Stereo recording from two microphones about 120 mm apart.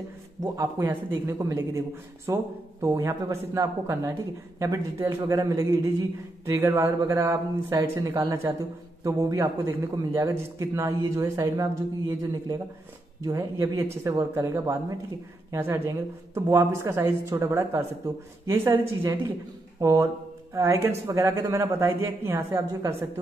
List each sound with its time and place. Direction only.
0.4 s a man's voice: 30° right (ahead or behind)
0.8 s a man's voice: 20° right (ahead or behind)